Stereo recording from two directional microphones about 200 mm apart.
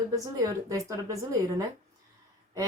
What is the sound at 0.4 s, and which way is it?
Speech, 15° right (ahead or behind).